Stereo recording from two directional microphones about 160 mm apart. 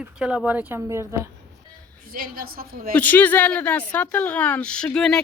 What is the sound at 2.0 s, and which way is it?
Speech, 65° right (ahead or behind).